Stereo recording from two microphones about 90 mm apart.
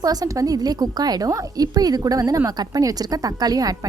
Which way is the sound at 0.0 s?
45° right (ahead or behind).